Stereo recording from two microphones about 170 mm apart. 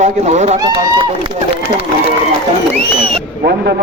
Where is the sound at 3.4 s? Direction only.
75° right (ahead or behind).